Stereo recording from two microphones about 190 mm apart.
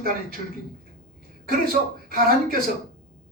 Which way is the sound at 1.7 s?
50° right (ahead or behind).